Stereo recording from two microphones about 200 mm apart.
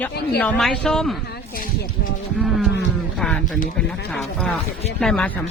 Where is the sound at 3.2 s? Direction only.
5° left (ahead or behind).